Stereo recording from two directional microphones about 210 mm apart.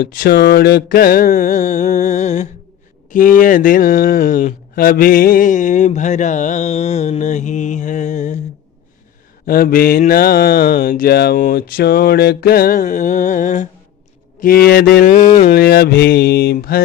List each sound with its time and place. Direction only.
0.0 s speech: 45° left (ahead or behind)
9.5 s mantra: 45° left (ahead or behind)